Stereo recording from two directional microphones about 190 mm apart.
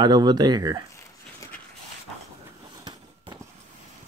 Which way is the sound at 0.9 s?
15° left (ahead or behind).